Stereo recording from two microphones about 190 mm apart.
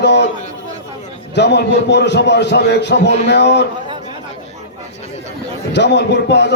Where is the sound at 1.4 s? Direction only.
65° left (ahead or behind).